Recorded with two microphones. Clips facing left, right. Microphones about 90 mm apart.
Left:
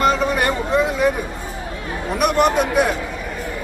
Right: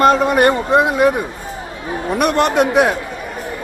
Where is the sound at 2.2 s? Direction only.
85° right.